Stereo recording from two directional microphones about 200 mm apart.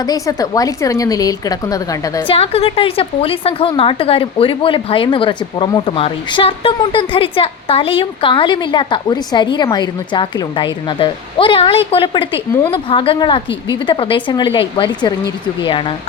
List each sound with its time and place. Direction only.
0.0 s a woman's voice: 20° left (ahead or behind)
2.3 s a woman's voice: 30° left (ahead or behind)